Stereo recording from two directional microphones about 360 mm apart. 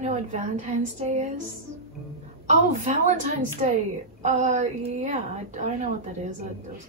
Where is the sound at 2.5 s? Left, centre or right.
Centre.